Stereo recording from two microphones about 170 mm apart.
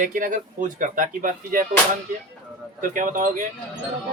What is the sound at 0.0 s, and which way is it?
Speech, 50° right (ahead or behind).